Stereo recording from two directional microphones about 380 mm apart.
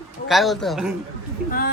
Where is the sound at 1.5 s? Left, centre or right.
Left.